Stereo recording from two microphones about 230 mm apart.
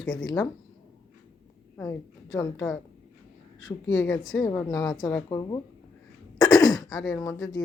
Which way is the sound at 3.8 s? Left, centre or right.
Centre.